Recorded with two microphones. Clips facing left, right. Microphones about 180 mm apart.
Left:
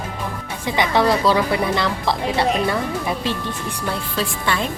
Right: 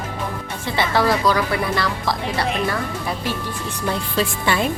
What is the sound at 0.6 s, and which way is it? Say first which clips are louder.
A woman's voice: left 2 dB; 15° left (ahead or behind).